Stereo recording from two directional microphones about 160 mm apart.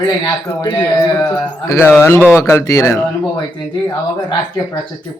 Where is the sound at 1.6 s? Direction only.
15° left (ahead or behind).